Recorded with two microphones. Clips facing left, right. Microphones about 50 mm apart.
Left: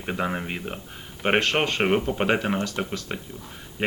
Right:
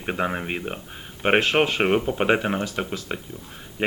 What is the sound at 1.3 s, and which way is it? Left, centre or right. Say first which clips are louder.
Speech: right 3 dB; centre.